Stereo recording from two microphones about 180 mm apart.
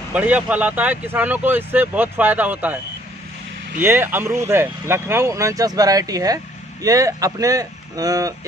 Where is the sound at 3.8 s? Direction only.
10° right (ahead or behind).